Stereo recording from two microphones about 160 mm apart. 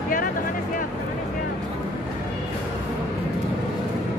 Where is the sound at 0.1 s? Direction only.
60° left (ahead or behind).